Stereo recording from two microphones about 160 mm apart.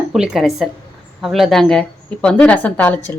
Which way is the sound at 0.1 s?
Centre (ahead or behind).